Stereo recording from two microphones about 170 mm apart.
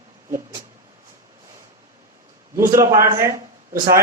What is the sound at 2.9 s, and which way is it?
Speech, 55° right (ahead or behind).